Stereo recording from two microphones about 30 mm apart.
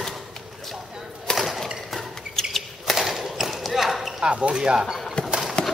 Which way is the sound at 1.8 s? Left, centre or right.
Centre.